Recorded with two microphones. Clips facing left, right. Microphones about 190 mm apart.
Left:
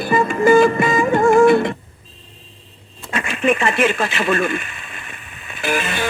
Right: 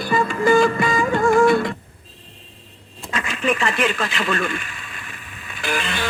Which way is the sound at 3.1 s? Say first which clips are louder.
Left 4 dB; 25° left (ahead or behind).